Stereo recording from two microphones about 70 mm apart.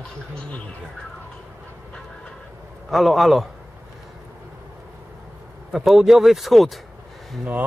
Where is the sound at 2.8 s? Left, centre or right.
Centre.